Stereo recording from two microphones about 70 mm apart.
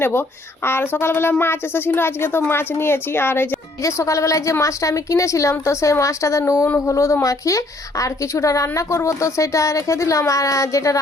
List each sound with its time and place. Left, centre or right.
0.0 s speech: left
3.8 s a woman's voice: left